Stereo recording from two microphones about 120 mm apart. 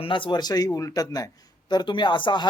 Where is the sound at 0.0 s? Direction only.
45° left (ahead or behind).